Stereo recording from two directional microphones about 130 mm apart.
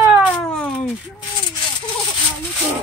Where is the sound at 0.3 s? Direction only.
10° left (ahead or behind).